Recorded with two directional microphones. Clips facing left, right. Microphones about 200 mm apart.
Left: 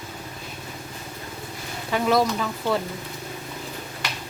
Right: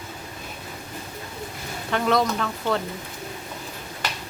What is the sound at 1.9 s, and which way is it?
Speech, 5° left (ahead or behind).